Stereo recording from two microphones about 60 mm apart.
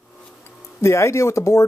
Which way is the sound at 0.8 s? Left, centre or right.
Left.